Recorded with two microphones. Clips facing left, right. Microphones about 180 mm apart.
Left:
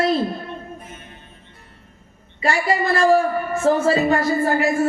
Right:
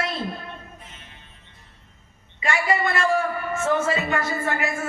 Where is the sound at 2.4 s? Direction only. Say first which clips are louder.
Left 3 dB; 35° left (ahead or behind).